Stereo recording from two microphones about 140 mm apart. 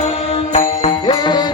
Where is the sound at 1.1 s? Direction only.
30° left (ahead or behind).